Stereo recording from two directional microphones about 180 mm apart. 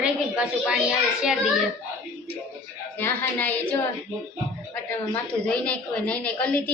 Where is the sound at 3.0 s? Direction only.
10° left (ahead or behind).